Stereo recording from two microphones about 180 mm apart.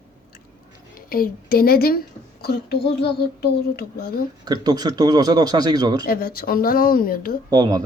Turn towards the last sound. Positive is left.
turn(degrees=-20)  # may be behind; listen again after turning